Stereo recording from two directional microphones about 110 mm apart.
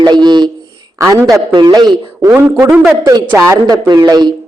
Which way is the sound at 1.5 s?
40° right (ahead or behind).